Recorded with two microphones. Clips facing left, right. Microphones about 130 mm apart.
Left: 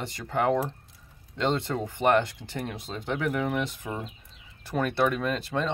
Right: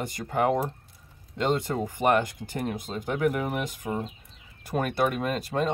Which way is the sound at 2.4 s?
45° right (ahead or behind).